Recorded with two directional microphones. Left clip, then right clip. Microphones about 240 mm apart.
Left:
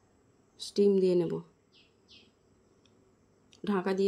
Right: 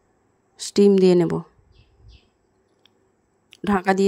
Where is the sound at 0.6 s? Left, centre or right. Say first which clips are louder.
Right 10 dB; right.